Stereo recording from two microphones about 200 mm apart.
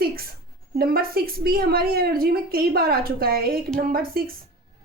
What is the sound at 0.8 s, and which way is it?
A woman's voice, 50° right (ahead or behind).